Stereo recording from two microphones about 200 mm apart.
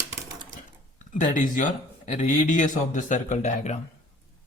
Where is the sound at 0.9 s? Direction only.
40° left (ahead or behind).